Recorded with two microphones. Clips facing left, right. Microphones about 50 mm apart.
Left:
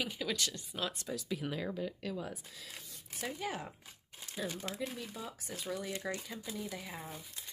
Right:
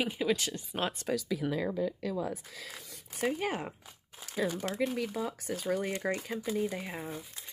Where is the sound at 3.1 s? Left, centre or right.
Right.